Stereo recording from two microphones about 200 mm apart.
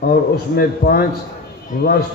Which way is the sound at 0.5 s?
50° left (ahead or behind).